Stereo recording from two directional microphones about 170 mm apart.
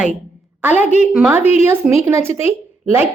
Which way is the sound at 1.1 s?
10° right (ahead or behind).